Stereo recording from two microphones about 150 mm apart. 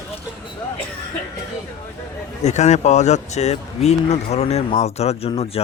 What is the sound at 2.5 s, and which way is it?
Speech, 50° left (ahead or behind).